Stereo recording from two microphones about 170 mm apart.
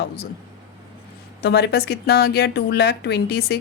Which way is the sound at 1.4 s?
75° left (ahead or behind).